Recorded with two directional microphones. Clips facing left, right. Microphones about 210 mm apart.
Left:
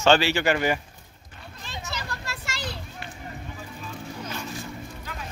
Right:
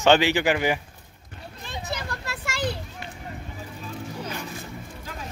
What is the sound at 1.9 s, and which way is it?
Children playing, 55° right (ahead or behind).